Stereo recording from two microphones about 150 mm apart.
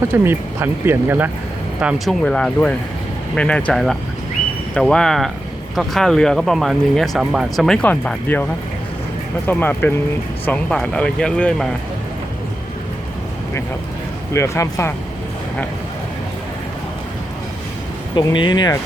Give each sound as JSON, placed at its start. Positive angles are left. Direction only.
{"t": 0.1, "sound": "speech", "side_deg": -15}
{"t": 2.2, "sound": "speech", "side_deg": 5}
{"t": 9.5, "sound": "speech", "side_deg": 15}
{"t": 14.3, "sound": "speech", "side_deg": 20}
{"t": 18.2, "sound": "speech", "side_deg": 30}